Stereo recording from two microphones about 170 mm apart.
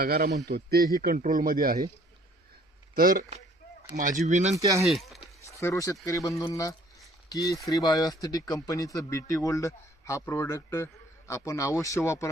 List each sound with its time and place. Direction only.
0.0 s a man's voice: 65° right (ahead or behind)
2.9 s a man's voice: 55° right (ahead or behind)
4.5 s speech: 20° right (ahead or behind)
4.8 s speech: centre (ahead or behind)
5.5 s speech: 20° left (ahead or behind)